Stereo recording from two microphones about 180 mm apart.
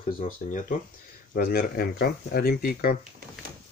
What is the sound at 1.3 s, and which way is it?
Speech, 55° left (ahead or behind).